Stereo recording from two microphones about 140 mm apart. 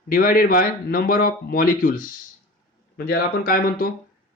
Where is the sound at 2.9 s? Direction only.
90° left.